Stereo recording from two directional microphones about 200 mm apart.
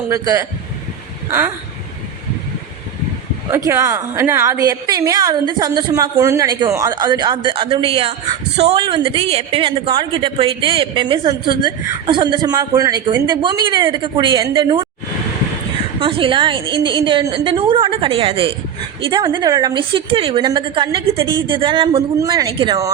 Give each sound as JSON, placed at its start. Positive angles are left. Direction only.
{"t": 0.1, "sound": "a woman's voice", "side_deg": -15}
{"t": 3.7, "sound": "a woman's voice", "side_deg": -15}
{"t": 16.0, "sound": "a woman's voice", "side_deg": -25}